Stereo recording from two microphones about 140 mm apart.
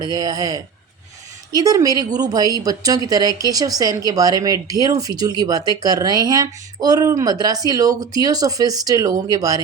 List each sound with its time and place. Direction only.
0.0 s speech: 25° right (ahead or behind)